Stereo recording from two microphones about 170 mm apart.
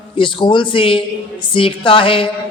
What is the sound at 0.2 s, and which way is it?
A man's voice, 30° left (ahead or behind).